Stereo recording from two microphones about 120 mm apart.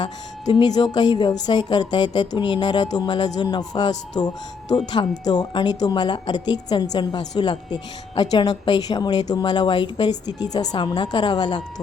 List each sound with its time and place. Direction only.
0.0 s a woman's voice: 35° left (ahead or behind)